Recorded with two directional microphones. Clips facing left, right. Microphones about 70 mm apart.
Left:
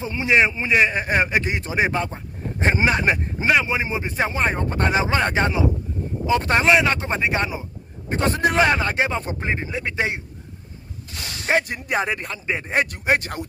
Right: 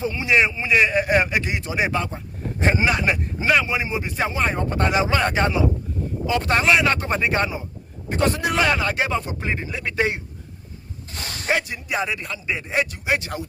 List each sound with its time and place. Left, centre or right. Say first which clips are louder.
0.0 s speech: left 1 dB; left
8.1 s speech: left 2 dB; left
11.1 s snake: right 1 dB; right
11.6 s speech: left 2 dB; left